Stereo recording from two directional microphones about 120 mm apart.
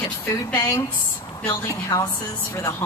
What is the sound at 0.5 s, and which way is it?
Speech, 20° left (ahead or behind).